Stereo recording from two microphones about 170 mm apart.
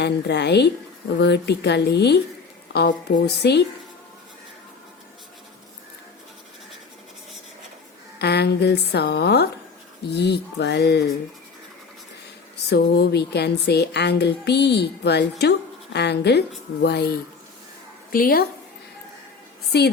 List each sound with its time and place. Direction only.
0.0 s speech: 80° left
3.2 s a woman's voice: 75° left (ahead or behind)
8.2 s a woman's voice: 75° left (ahead or behind)
12.6 s a woman's voice: 75° left (ahead or behind)
18.1 s a woman's voice: 55° left (ahead or behind)
19.7 s a woman's voice: 70° left (ahead or behind)